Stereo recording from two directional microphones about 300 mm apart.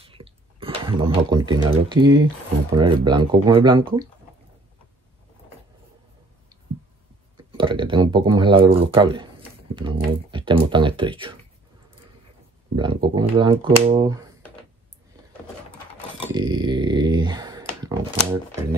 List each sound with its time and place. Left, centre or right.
0.0 s a sound: centre
2.7 s speech: centre
7.5 s speech: centre
10.3 s speech: centre
12.7 s speech: centre
16.3 s speech: centre